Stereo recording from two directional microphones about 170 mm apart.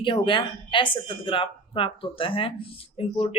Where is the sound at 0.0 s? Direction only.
30° left (ahead or behind).